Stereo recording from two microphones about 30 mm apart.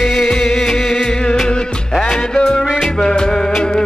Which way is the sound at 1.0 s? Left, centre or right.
Left.